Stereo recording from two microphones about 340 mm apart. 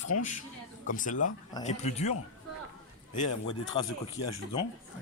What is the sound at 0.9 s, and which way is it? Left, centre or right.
Speech, left.